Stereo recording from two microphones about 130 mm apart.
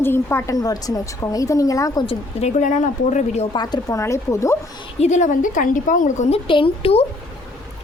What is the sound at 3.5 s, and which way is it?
A woman's voice, 30° left (ahead or behind).